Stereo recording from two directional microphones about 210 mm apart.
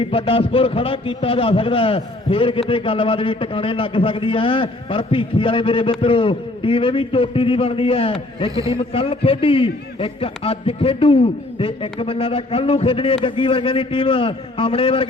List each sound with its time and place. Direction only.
0.0 s a man's voice: 25° left (ahead or behind)